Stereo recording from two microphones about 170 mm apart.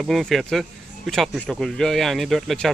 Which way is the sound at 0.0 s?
Centre (ahead or behind).